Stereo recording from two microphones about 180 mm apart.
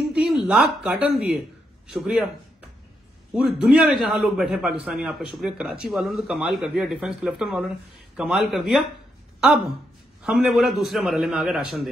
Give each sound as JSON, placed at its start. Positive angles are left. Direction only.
{"t": 0.1, "sound": "a man's voice", "side_deg": -5}
{"t": 3.3, "sound": "a man's voice", "side_deg": 0}
{"t": 10.2, "sound": "a man's voice", "side_deg": 0}